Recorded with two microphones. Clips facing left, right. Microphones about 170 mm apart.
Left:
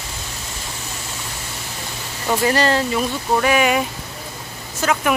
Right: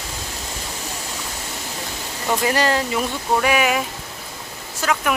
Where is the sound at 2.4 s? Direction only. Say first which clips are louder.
Left 3 dB; 10° right (ahead or behind).